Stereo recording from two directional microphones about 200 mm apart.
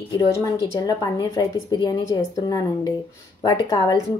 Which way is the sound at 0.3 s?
15° left (ahead or behind).